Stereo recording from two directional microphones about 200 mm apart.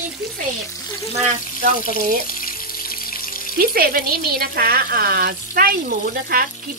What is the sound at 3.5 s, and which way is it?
Speech, 50° right (ahead or behind).